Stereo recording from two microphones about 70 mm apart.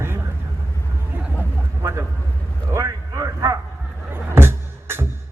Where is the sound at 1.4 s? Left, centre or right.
Right.